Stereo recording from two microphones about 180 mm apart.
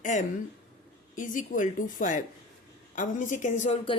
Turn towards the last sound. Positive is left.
turn(degrees=45)  # may be behind; listen again after turning